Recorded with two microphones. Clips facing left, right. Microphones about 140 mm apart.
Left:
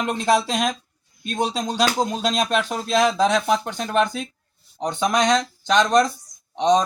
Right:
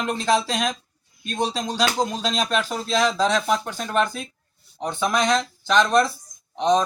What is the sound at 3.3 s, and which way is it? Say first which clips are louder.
Speech: left 2 dB; centre (ahead or behind).